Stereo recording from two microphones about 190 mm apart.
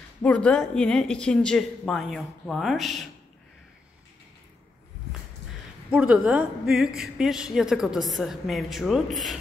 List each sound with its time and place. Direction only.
0.2 s a woman's voice: 5° left (ahead or behind)
5.9 s a woman's voice: 5° right (ahead or behind)